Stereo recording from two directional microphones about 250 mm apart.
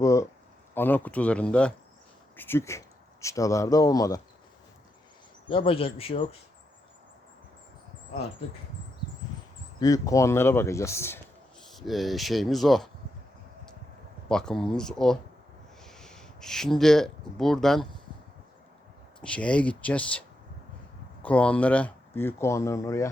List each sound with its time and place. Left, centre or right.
0.0 s a sound: centre
0.7 s speech: centre
5.5 s speech: left
9.8 s speech: centre
14.3 s speech: centre
19.2 s speech: centre